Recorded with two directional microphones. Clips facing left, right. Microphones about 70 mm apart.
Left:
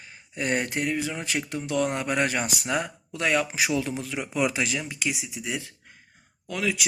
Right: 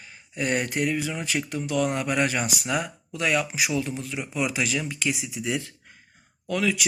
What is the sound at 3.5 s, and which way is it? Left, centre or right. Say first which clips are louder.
Speech: left 1 dB; left.